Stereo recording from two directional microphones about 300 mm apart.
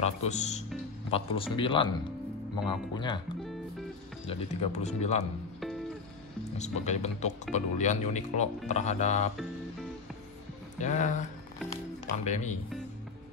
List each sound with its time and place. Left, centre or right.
0.0 s speech: left
4.3 s speech: left
6.6 s speech: left
10.8 s speech: left
12.3 s speech: left